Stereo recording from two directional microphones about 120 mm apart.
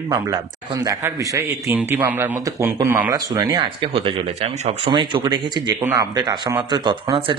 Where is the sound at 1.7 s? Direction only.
15° right (ahead or behind); by 3.7 s 35° right (ahead or behind).